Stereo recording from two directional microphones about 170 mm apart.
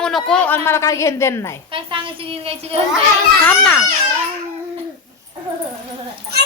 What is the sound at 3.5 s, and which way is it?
Speech, 5° left (ahead or behind).